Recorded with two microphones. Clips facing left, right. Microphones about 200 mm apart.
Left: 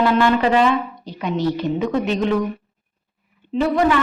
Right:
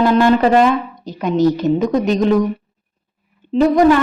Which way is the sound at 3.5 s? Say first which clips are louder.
Right 6 dB; 40° right (ahead or behind).